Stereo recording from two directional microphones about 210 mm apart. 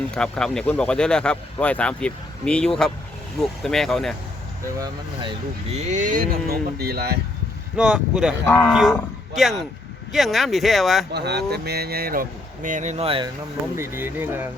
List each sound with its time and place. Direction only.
0.1 s speech: 5° left (ahead or behind)
5.7 s speech: 35° right (ahead or behind)
7.8 s speech: 5° right (ahead or behind)
8.4 s speech: 10° left (ahead or behind)
8.7 s speech: centre (ahead or behind)
11.1 s speech: 50° right (ahead or behind); by 13.3 s 25° right (ahead or behind)
13.7 s speech: 10° right (ahead or behind)